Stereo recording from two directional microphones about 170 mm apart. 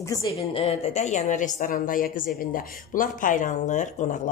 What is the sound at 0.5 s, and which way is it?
Speech, 35° left (ahead or behind).